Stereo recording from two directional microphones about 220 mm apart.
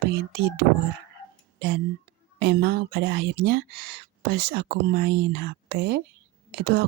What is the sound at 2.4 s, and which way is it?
Speech, 50° right (ahead or behind).